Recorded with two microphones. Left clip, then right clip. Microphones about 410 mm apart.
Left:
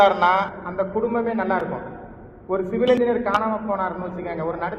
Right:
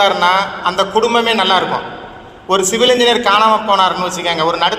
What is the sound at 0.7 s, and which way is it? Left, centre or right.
A man's voice, right.